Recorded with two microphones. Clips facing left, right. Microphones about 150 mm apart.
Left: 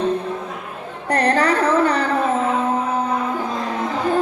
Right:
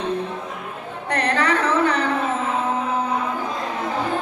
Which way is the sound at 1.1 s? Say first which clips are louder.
Left 4 dB; 40° left (ahead or behind).